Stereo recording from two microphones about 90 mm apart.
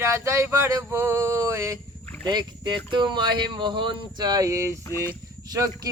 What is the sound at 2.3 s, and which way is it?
Speech, 55° right (ahead or behind).